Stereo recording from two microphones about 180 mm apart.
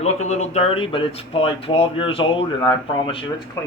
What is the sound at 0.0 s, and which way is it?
Speech, 40° left (ahead or behind).